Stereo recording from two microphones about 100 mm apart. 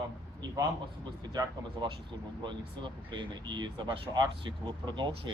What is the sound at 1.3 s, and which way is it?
Speech, 45° right (ahead or behind).